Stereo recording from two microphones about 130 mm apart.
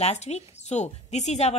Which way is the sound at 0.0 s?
55° left (ahead or behind).